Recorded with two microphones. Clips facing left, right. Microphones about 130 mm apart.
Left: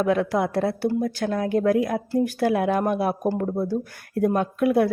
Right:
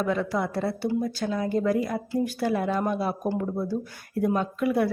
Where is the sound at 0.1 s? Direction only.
60° left (ahead or behind).